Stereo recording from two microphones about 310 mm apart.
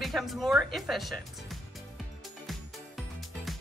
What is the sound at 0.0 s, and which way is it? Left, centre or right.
Speech, centre.